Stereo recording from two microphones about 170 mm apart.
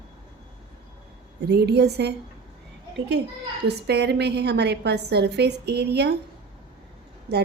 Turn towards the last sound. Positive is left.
turn(degrees=-80)